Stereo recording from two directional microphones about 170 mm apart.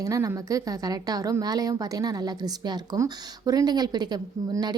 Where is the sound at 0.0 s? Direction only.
20° right (ahead or behind).